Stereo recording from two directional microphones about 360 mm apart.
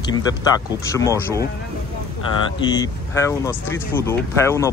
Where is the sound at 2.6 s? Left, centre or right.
Centre.